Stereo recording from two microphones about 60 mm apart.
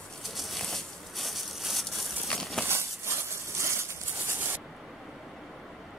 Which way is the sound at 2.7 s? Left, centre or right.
Right.